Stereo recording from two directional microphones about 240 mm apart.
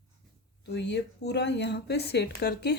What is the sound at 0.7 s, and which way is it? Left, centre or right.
Speech, left.